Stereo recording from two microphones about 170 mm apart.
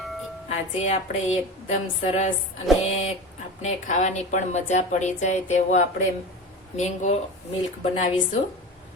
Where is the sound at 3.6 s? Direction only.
45° left (ahead or behind).